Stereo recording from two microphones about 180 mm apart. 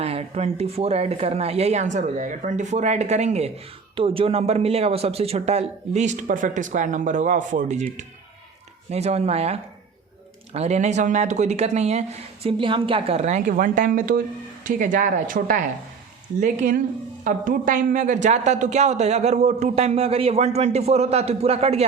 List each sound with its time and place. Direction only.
0.0 s a woman's voice: 35° right (ahead or behind)